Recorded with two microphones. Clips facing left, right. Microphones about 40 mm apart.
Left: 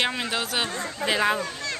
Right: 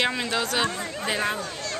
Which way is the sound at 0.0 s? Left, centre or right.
Centre.